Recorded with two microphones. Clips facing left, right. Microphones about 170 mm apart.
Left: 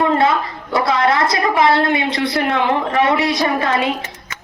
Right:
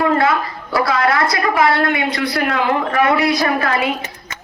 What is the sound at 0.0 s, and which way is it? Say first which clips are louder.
A woman's voice: even; 25° left (ahead or behind).